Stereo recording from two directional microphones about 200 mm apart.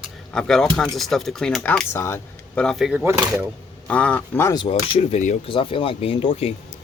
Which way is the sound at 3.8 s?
5° left (ahead or behind).